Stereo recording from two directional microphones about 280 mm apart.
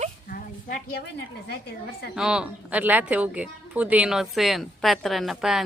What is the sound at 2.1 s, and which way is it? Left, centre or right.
A woman's voice, centre.